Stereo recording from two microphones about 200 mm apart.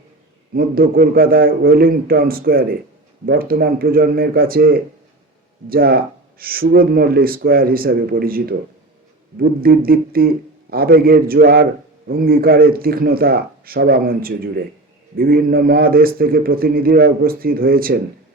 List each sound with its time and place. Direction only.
0.5 s speech: 45° right (ahead or behind)